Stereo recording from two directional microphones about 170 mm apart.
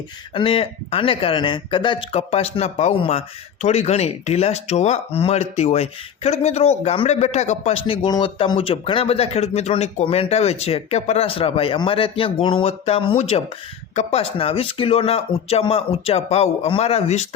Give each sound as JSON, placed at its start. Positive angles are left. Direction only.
{"t": 0.3, "sound": "speech", "side_deg": 30}